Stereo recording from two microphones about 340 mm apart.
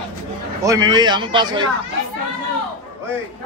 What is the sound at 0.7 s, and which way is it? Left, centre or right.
A man's voice, centre.